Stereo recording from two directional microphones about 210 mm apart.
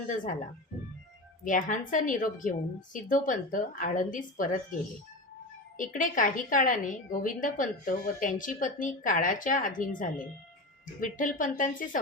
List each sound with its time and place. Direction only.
1.5 s a woman's voice: 40° left (ahead or behind)
5.7 s a woman's voice: 40° left (ahead or behind)